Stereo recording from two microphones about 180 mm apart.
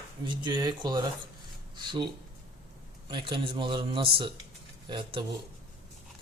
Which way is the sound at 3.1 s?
25° right (ahead or behind).